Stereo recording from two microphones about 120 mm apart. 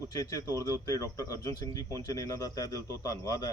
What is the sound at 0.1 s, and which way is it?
Speech, 30° left (ahead or behind).